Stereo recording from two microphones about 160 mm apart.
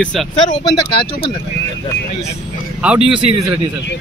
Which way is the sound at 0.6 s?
30° left (ahead or behind).